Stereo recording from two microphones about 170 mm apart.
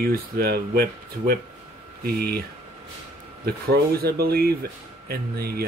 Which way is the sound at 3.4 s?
65° right (ahead or behind).